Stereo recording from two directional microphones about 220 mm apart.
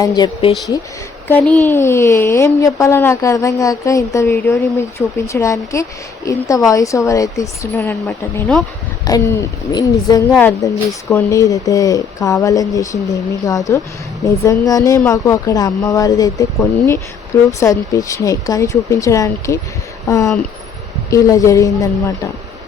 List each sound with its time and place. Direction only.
0.0 s a woman's voice: 15° left (ahead or behind)